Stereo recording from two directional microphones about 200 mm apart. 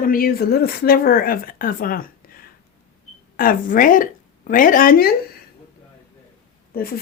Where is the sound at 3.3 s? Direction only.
45° left (ahead or behind).